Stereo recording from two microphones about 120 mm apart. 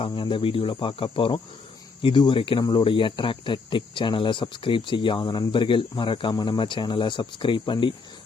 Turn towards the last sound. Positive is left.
turn(degrees=45)  # may be behind; listen again after turning